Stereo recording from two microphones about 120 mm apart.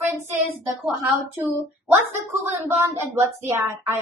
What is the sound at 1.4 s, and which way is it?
Speech, 15° right (ahead or behind).